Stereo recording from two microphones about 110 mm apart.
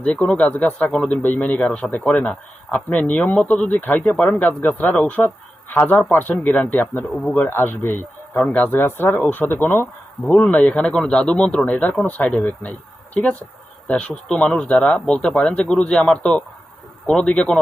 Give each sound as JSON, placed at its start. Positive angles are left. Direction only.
{"t": 0.0, "sound": "speech", "side_deg": 10}
{"t": 13.8, "sound": "speech", "side_deg": 10}